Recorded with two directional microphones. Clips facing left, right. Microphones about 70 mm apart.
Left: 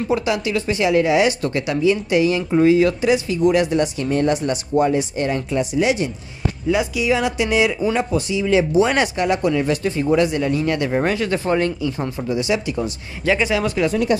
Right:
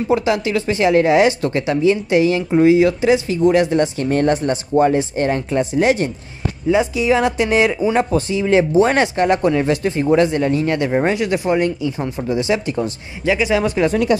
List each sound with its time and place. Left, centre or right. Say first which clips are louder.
0.1 s speech: right 3 dB; right
4.0 s speech: right 2 dB; right
4.4 s speech: right 3 dB; right
10.9 s speech: right 2 dB; centre
12.3 s speech: right 2 dB; right
13.2 s speech: right 1 dB; centre
13.5 s speech: right 3 dB; right